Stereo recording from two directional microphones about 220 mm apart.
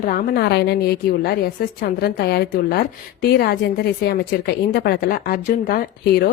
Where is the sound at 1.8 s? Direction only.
45° left (ahead or behind).